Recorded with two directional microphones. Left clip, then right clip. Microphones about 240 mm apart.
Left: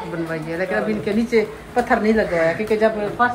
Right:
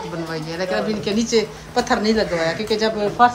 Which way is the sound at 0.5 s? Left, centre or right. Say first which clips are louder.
Even; centre.